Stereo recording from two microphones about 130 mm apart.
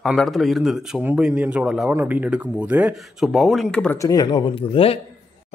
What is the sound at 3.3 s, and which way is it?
Speech, centre (ahead or behind).